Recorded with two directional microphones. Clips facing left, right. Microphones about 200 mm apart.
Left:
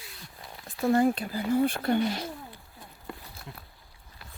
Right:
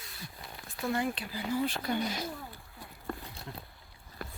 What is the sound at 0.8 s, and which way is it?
Speech, 45° left (ahead or behind).